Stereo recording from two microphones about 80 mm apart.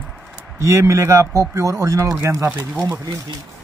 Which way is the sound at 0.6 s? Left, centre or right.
Right.